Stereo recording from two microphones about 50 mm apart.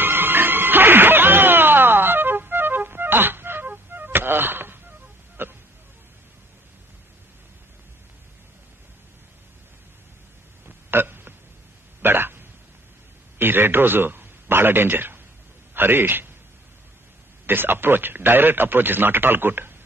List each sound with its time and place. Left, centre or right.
0.0 s music: right
3.6 s music: right
5.4 s a sound: right
10.9 s hiccup: right
12.0 s a sound: right
13.4 s a man's voice: right
17.5 s speech: right